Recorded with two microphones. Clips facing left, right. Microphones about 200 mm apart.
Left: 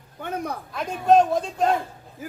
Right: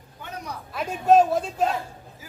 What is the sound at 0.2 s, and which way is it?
Speech, 55° left (ahead or behind).